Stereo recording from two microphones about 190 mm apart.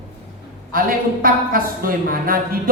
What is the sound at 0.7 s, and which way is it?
A man's voice, 50° right (ahead or behind).